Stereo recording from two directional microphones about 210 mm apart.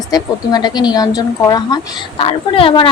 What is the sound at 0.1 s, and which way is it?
A woman's voice, 20° left (ahead or behind).